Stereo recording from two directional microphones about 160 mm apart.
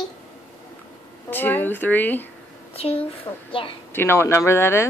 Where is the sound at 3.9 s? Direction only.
15° left (ahead or behind).